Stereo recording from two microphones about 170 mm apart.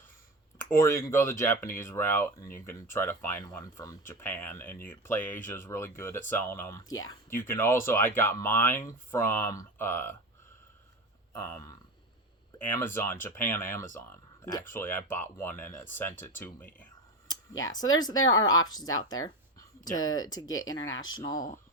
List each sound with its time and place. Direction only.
0.6 s speech: 15° left (ahead or behind)
11.3 s speech: 15° left (ahead or behind)
17.2 s speech: 20° left (ahead or behind)